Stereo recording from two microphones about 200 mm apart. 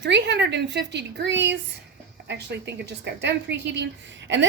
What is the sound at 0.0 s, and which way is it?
A woman's voice, 60° right (ahead or behind).